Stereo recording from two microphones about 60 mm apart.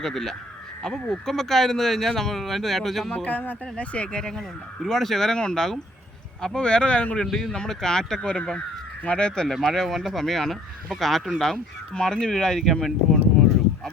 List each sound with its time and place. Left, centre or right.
0.0 s speech: centre
3.2 s speech: left
7.3 s speech: centre
9.5 s speech: centre